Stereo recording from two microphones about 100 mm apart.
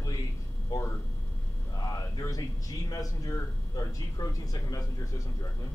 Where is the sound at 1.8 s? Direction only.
40° left (ahead or behind).